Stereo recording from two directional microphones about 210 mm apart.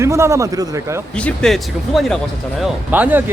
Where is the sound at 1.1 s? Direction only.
5° left (ahead or behind).